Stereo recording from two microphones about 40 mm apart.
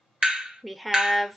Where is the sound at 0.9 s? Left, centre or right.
Centre.